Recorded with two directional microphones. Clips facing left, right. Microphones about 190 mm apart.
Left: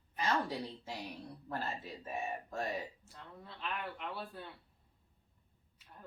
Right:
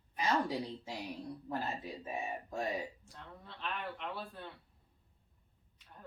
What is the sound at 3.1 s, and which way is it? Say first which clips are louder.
Speech: even; 5° left (ahead or behind).